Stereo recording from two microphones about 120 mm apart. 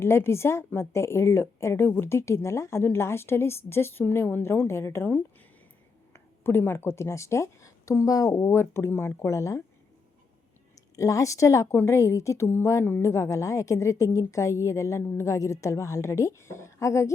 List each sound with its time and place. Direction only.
0.0 s a woman's voice: 20° left (ahead or behind)
10.9 s a woman's voice: 25° left (ahead or behind)